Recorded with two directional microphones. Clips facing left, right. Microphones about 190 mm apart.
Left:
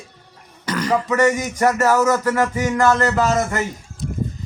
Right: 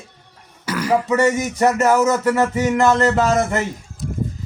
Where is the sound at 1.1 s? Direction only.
25° right (ahead or behind).